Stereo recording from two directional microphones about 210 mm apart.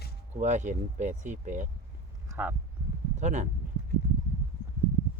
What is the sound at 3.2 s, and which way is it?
Speech, 35° right (ahead or behind).